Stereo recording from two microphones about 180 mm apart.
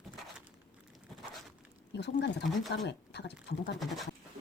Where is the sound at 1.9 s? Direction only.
70° left (ahead or behind).